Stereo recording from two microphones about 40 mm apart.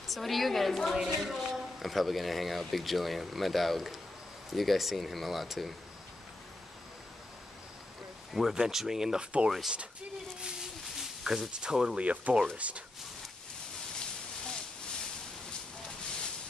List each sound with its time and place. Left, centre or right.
0.1 s speech: centre
8.3 s speech: centre
9.2 s speech: right
10.4 s a sound: centre
11.6 s speech: centre
12.0 s speech: right
13.9 s a sound: centre